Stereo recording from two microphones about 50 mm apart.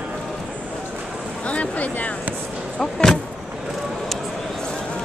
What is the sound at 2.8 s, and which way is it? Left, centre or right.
Speech, centre.